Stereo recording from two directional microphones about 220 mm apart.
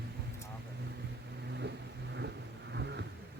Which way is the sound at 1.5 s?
50° right (ahead or behind).